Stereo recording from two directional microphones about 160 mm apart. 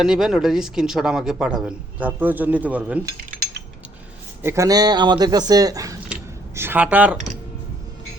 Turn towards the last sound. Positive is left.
turn(degrees=-10)  # may be behind; listen again after turning